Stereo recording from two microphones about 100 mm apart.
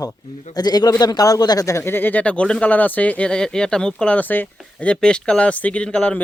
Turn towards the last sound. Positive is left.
turn(degrees=10)  # may be behind; listen again after turning